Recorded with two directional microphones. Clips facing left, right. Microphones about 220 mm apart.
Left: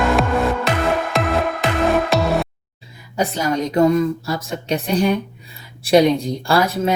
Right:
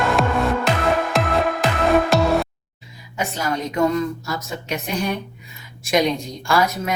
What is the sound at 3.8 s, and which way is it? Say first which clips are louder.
Speech: left 5 dB; 35° left (ahead or behind).